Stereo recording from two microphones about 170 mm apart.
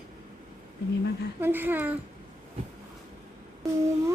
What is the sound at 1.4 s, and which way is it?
Speech, 10° right (ahead or behind).